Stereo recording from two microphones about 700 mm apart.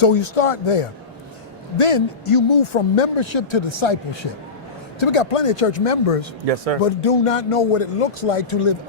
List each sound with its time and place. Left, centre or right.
0.0 s speech: left
4.9 s speech: left
6.4 s speech: right
6.7 s speech: left